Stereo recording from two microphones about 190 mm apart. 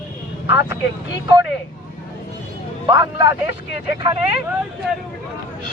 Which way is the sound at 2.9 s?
25° right (ahead or behind).